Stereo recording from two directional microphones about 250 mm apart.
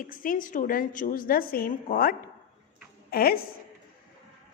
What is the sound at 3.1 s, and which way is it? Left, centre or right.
Speech, left.